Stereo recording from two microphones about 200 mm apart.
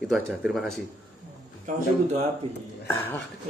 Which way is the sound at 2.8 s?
10° left (ahead or behind).